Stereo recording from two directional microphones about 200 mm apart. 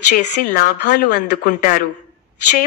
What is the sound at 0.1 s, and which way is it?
Speech, 40° left (ahead or behind).